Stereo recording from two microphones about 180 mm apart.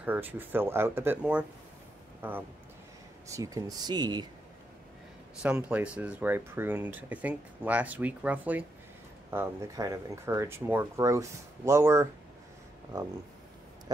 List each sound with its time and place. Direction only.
0.0 s speech: 10° right (ahead or behind)
5.4 s speech: 10° right (ahead or behind)